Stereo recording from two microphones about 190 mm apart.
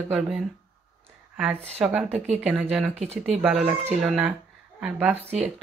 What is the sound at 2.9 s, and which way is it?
Speech, 35° right (ahead or behind).